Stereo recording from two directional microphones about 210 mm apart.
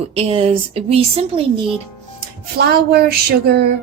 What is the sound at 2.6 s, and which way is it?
Speech, 50° right (ahead or behind).